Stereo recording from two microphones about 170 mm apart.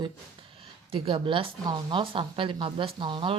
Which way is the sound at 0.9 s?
30° right (ahead or behind).